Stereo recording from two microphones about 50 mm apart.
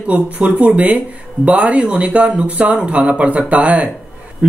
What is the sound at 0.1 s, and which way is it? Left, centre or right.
Speech, right.